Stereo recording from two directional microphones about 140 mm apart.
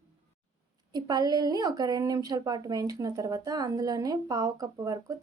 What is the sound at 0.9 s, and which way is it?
Speech, 30° right (ahead or behind).